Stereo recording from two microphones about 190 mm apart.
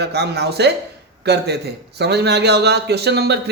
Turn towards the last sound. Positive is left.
turn(degrees=-60)  # may be behind; listen again after turning